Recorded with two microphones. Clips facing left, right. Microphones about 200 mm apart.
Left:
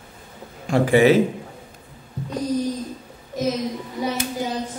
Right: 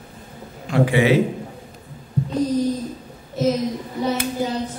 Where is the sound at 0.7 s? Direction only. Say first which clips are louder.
Left 2 dB; 45° left (ahead or behind).